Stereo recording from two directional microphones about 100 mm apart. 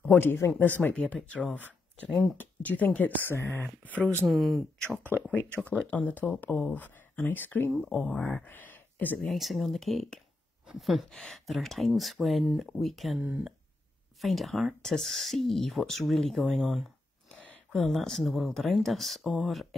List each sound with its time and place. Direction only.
0.0 s speech: 20° left (ahead or behind)
4.3 s speech: centre (ahead or behind)
5.1 s speech: 25° left (ahead or behind)
7.7 s speech: 5° left (ahead or behind)
9.2 s speech: centre (ahead or behind)
14.2 s speech: centre (ahead or behind)